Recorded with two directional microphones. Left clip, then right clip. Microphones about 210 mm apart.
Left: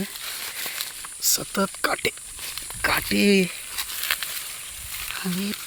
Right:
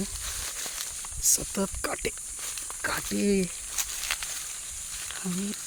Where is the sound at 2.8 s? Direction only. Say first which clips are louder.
Left 8 dB; 15° left (ahead or behind).